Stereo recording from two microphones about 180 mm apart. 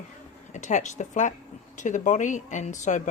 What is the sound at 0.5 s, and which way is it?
Speech, 40° left (ahead or behind).